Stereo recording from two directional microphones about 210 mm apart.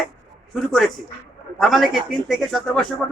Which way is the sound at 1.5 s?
Centre (ahead or behind).